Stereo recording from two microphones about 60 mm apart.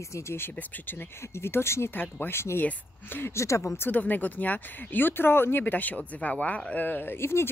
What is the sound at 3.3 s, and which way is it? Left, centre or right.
Speech, left.